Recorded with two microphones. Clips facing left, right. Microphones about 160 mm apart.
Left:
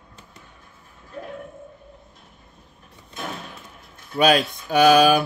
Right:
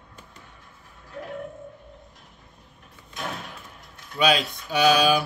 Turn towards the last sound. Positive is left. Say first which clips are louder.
# left 5 dB
turn(degrees=50)  # may be behind; listen again after turning